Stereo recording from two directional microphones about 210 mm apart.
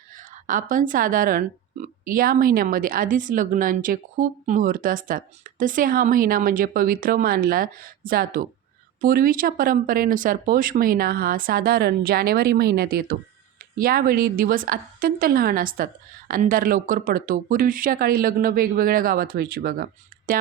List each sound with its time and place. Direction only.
0.2 s speech: 40° right (ahead or behind)